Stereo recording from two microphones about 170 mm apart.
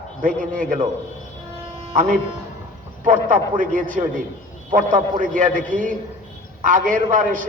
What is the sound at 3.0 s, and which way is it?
A man's voice, 50° right (ahead or behind).